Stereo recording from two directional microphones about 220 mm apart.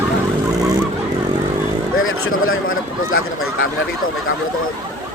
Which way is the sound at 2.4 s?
65° left (ahead or behind).